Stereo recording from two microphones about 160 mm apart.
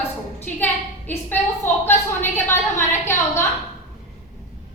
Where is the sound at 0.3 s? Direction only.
10° left (ahead or behind).